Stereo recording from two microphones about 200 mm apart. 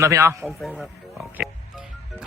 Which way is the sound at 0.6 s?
Centre (ahead or behind).